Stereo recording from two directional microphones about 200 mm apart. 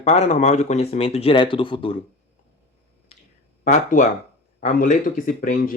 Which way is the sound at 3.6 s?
40° left (ahead or behind).